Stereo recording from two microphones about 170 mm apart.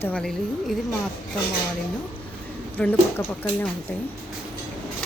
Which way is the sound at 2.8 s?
5° left (ahead or behind).